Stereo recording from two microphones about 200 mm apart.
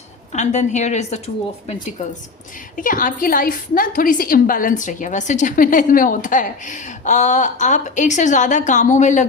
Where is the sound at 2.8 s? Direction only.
45° left (ahead or behind).